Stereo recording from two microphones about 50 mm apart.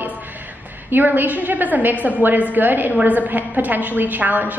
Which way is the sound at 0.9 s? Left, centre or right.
Right.